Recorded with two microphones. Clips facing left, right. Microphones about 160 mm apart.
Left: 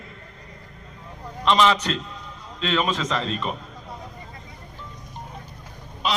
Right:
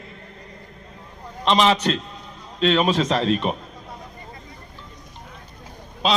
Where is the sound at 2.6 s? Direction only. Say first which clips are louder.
Right 5 dB; 60° right (ahead or behind).